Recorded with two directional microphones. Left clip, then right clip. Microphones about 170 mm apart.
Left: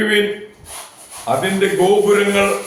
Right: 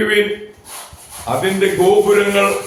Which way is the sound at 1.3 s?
5° left (ahead or behind).